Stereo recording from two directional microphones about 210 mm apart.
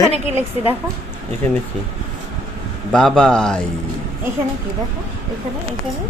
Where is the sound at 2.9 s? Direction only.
5° left (ahead or behind).